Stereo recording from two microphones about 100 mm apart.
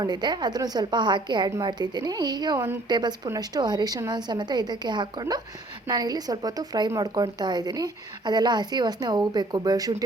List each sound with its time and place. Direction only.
0.0 s a woman's voice: 45° right (ahead or behind)